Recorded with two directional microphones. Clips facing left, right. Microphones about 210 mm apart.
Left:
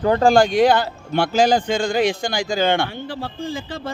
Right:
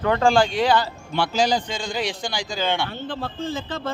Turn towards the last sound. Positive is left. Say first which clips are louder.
# even
turn(degrees=10)  # may be behind; listen again after turning